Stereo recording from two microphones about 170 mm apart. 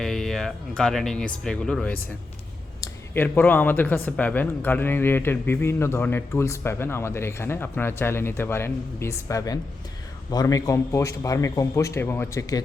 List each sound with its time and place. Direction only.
0.0 s speech: centre (ahead or behind); by 12.6 s 20° left (ahead or behind)